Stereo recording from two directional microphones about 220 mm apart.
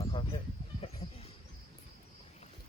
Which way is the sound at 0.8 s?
30° left (ahead or behind).